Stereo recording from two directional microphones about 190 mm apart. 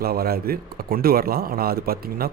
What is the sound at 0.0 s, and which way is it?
A man's voice, 50° right (ahead or behind).